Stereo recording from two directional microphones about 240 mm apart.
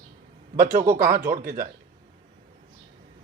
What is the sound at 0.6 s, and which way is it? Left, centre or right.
Speech, right.